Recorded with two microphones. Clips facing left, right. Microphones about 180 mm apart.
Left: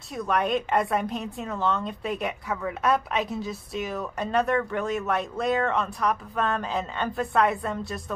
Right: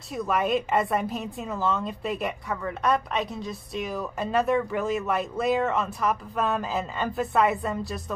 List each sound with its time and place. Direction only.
0.1 s a woman's voice: centre (ahead or behind)